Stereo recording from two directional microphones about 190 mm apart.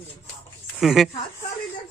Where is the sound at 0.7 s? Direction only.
Centre (ahead or behind).